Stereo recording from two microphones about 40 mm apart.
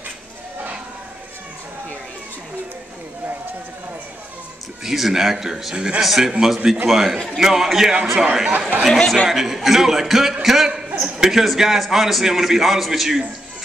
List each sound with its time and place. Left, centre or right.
4.8 s a man's voice: centre
5.8 s a man's voice: right
6.0 s a man's voice: centre
8.5 s speech: right
8.8 s speech: centre
9.2 s a man's voice: centre
10.4 s a sound: centre
11.1 s a man's voice: centre